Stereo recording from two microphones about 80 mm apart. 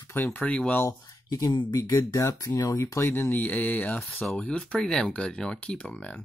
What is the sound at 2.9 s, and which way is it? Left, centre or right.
Speech, left.